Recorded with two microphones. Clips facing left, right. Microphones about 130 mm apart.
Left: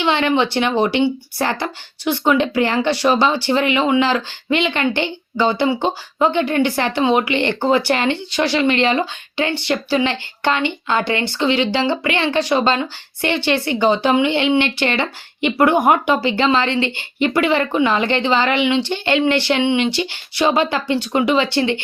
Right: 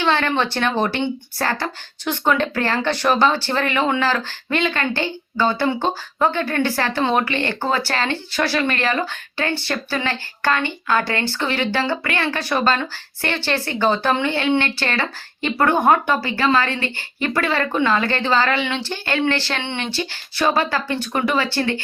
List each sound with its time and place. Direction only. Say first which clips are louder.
0.0 s speech: left 3 dB; 15° left (ahead or behind)